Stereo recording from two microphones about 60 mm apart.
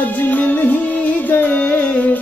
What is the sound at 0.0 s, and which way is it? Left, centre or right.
Music, left.